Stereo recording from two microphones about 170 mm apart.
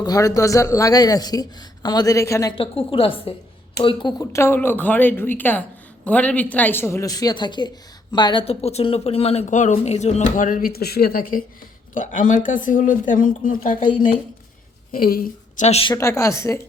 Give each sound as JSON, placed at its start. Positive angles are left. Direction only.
{"t": 0.0, "sound": "a man's voice", "side_deg": 20}
{"t": 2.6, "sound": "a woman's voice", "side_deg": 30}
{"t": 14.9, "sound": "speech", "side_deg": 60}
{"t": 15.6, "sound": "speech", "side_deg": 35}
{"t": 16.0, "sound": "speech", "side_deg": 15}